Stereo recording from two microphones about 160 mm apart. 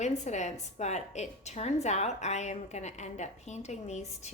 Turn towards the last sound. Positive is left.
turn(degrees=45)  # may be behind; listen again after turning